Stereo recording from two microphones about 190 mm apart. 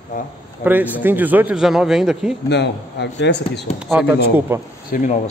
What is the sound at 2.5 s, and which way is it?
A man's voice, 60° left (ahead or behind).